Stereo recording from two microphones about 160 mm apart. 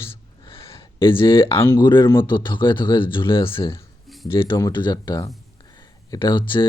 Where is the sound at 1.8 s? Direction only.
30° left (ahead or behind).